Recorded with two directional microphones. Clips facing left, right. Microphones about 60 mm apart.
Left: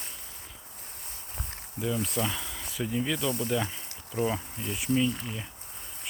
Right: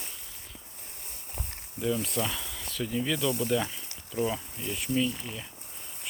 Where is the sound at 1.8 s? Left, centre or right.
Centre.